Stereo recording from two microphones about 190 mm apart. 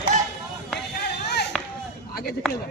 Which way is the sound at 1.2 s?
60° left (ahead or behind).